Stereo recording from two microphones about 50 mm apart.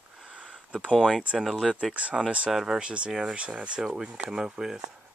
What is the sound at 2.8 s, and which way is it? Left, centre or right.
Speech, centre.